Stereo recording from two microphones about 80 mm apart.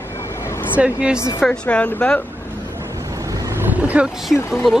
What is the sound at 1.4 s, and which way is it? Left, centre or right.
Speech, centre.